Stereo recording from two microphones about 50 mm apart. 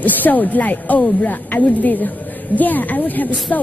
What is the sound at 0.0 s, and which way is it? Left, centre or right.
Speech, left.